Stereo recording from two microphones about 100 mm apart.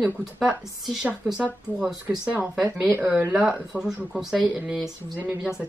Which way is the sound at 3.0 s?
15° right (ahead or behind).